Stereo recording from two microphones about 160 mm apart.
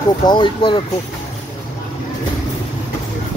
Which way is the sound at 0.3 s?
30° left (ahead or behind).